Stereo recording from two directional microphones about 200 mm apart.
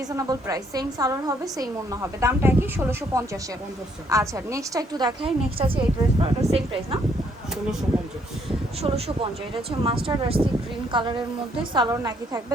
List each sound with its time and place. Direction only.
0.1 s a woman's voice: 15° right (ahead or behind)
8.8 s a woman's voice: 30° right (ahead or behind)